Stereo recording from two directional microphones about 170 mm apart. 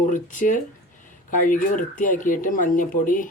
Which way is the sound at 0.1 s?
50° left (ahead or behind).